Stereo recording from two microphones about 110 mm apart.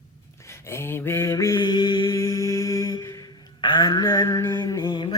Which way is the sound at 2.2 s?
30° left (ahead or behind).